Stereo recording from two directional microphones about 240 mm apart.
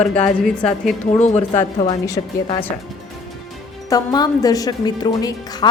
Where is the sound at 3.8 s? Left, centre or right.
Centre.